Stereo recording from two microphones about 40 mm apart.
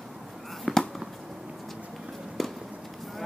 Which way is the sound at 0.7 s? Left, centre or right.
Centre.